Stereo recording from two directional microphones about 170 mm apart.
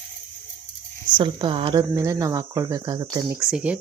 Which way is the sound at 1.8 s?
20° right (ahead or behind).